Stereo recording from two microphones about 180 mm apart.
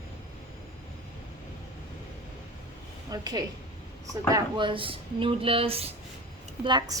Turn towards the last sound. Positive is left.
turn(degrees=-25)  # may be behind; listen again after turning